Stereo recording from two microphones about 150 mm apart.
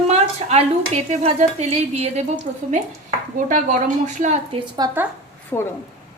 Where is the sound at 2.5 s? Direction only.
60° right (ahead or behind).